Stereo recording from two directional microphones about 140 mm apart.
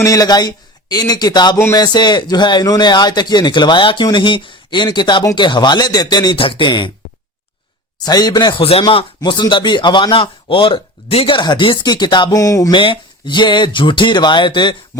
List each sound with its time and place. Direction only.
0.0 s a man's voice: 25° left (ahead or behind)
1.5 s speech: 15° left (ahead or behind)
1.8 s a man's voice: 30° left (ahead or behind)
7.9 s a man's voice: 30° left (ahead or behind)
12.8 s a man's voice: 35° left (ahead or behind)